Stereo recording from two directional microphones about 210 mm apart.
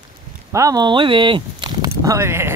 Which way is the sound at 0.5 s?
15° right (ahead or behind).